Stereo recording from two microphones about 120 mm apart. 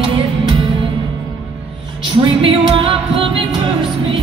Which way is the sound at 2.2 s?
45° right (ahead or behind).